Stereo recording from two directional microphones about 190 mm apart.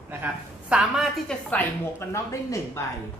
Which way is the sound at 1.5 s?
10° left (ahead or behind).